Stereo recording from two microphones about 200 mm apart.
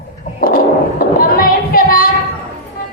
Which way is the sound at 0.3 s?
45° left (ahead or behind).